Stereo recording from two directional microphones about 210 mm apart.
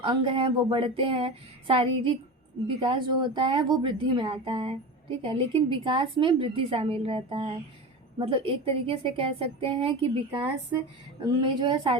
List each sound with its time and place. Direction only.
0.0 s a woman's voice: 25° right (ahead or behind)
11.2 s a woman's voice: 20° right (ahead or behind)